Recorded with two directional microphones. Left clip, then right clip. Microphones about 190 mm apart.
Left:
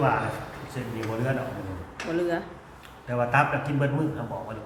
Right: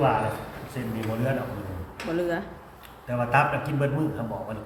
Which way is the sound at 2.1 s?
Centre (ahead or behind).